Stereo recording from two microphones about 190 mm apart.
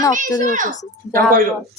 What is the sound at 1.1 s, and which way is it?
Speech, 50° right (ahead or behind).